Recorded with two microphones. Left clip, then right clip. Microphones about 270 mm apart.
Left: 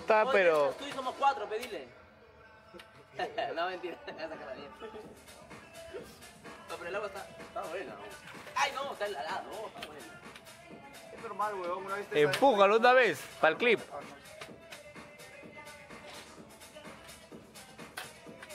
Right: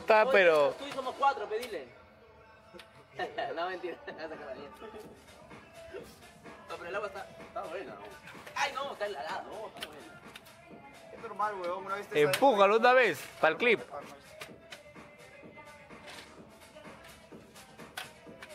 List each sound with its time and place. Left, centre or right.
0.0 s speech: centre
0.6 s speech: right
0.8 s speech: centre
3.2 s speech: centre
6.8 s speech: centre
7.1 s speech: centre
8.5 s speech: centre
11.3 s speech: centre
12.4 s speech: centre